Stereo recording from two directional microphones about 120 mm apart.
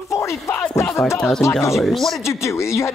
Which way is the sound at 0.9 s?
25° left (ahead or behind).